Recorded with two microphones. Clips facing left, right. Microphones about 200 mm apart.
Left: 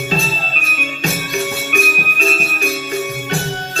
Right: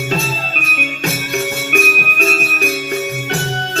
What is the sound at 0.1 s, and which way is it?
Jingle bell, 60° right (ahead or behind).